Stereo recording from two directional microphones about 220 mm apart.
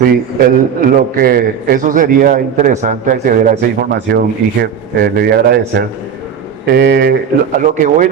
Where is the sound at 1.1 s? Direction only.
40° right (ahead or behind).